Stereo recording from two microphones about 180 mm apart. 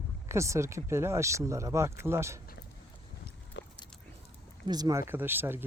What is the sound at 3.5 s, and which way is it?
Biting, 75° left (ahead or behind).